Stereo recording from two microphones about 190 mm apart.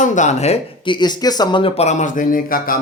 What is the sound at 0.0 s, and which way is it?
Speech, 40° left (ahead or behind).